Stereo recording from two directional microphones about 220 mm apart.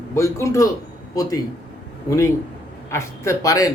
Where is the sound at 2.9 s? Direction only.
15° left (ahead or behind).